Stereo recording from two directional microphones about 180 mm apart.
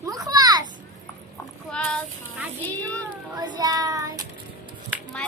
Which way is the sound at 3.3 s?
20° right (ahead or behind).